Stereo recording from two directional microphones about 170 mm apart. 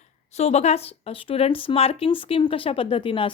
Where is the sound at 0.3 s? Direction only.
40° left (ahead or behind).